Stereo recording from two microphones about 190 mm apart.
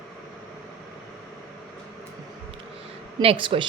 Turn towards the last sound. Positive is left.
turn(degrees=-25)  # may be behind; listen again after turning